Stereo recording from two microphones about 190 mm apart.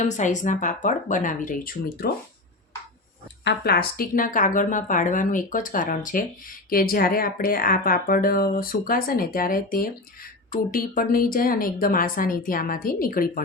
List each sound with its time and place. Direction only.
0.0 s a woman's voice: 40° left (ahead or behind)
3.4 s a woman's voice: 55° left (ahead or behind)